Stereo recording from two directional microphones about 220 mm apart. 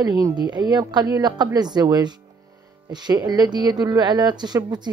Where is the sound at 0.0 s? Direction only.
15° right (ahead or behind).